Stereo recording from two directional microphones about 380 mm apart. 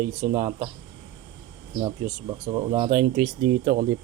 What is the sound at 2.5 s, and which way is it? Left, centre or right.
Speech, centre.